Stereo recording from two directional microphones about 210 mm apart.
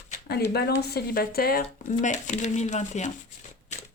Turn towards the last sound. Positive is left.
turn(degrees=35)  # may be behind; listen again after turning